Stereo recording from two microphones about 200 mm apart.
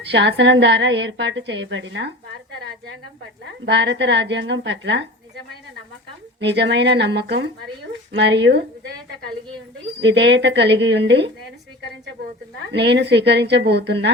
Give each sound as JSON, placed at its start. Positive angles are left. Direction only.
{"t": 0.0, "sound": "a woman's voice", "side_deg": -60}
{"t": 3.7, "sound": "a woman's voice", "side_deg": -60}
{"t": 6.4, "sound": "a woman's voice", "side_deg": -60}
{"t": 10.0, "sound": "a woman's voice", "side_deg": -60}
{"t": 12.7, "sound": "a woman's voice", "side_deg": -60}